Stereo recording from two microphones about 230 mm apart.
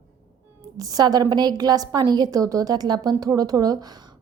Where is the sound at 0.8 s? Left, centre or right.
Centre.